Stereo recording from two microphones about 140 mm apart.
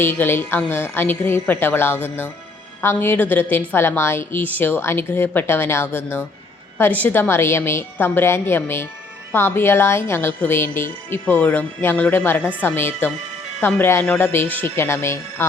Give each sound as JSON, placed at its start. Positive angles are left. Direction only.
{"t": 0.0, "sound": "a woman's voice", "side_deg": 15}